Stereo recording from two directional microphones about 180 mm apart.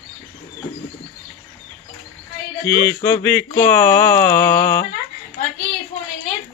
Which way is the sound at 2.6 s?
10° left (ahead or behind).